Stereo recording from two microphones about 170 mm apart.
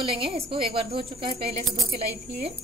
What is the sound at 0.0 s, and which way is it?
A woman's voice, 30° right (ahead or behind).